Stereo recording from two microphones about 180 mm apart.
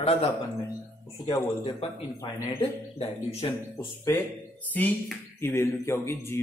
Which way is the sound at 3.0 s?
35° left (ahead or behind).